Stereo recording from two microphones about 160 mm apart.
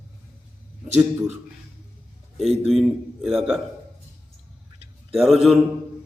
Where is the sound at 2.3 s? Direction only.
Centre (ahead or behind).